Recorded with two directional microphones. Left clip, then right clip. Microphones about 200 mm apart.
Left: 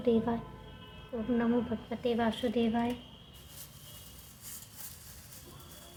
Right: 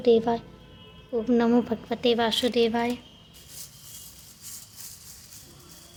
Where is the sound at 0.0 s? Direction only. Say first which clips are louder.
Right 9 dB; 50° right (ahead or behind).